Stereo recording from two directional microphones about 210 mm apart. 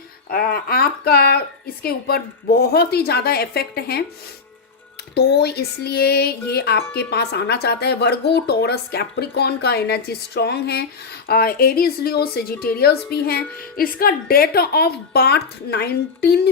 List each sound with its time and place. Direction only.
0.3 s music: 45° left (ahead or behind)
5.1 s music: 50° left (ahead or behind)